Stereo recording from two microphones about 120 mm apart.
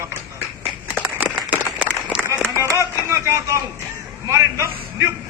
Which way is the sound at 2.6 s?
25° right (ahead or behind).